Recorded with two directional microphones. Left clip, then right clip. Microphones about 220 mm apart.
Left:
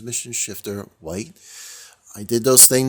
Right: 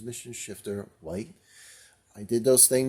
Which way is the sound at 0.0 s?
35° left (ahead or behind).